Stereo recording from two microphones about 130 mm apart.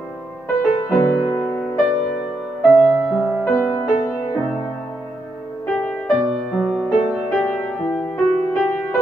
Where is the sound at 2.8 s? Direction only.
5° right (ahead or behind).